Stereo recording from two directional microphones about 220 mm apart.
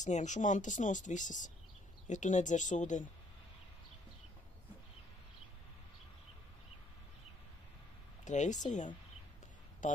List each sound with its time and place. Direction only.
0.0 s speech: 35° left (ahead or behind)
8.3 s a woman's voice: 35° left (ahead or behind)